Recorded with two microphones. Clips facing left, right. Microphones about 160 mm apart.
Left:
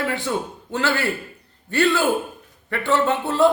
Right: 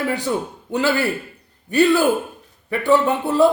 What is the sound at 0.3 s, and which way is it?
Speech, 15° right (ahead or behind).